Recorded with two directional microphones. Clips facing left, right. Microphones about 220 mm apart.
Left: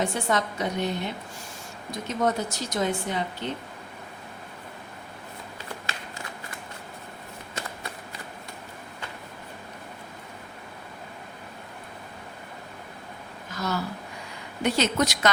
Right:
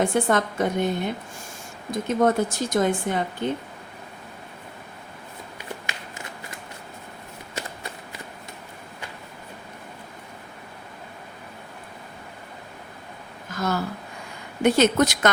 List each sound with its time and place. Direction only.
0.0 s a woman's voice: 55° right (ahead or behind)
13.5 s a sound: 50° right (ahead or behind)
14.6 s a woman's voice: 55° right (ahead or behind)